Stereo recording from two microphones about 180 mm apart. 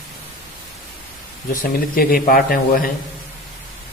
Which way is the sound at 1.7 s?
55° left (ahead or behind).